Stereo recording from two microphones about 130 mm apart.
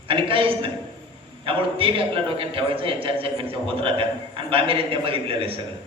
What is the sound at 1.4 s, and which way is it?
A man's voice, 45° right (ahead or behind).